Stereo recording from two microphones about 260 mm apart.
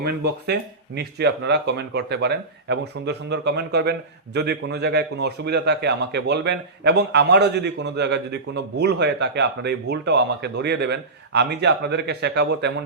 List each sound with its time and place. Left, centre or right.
0.0 s a man's voice: right